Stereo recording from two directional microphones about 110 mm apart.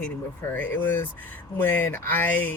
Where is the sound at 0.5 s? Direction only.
15° left (ahead or behind).